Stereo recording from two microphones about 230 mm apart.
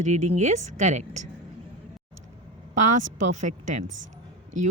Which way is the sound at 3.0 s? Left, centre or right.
Right.